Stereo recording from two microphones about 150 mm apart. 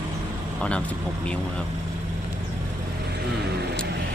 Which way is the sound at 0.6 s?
5° left (ahead or behind).